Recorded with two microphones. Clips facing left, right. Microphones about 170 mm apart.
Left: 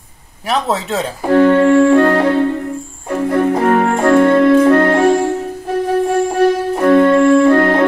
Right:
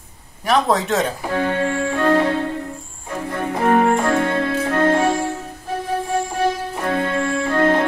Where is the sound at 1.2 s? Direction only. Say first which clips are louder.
Left 11 dB; 55° left (ahead or behind).